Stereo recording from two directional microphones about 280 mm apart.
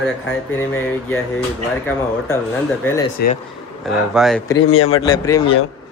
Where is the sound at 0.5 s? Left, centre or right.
Centre.